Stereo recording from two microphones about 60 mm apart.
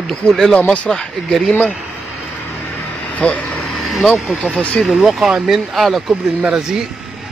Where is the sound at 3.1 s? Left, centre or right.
Left.